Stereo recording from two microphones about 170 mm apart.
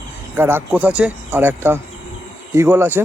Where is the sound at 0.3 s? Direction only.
15° right (ahead or behind).